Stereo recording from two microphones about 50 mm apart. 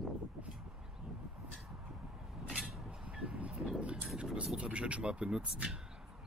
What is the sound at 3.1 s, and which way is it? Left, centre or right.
Music, right.